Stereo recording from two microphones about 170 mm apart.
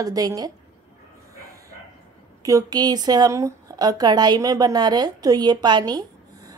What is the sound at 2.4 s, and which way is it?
Speech, 20° right (ahead or behind).